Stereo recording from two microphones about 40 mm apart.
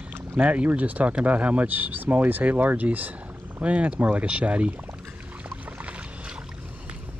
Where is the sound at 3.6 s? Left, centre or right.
Right.